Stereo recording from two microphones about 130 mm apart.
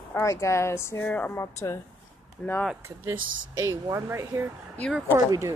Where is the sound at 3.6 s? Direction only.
20° right (ahead or behind).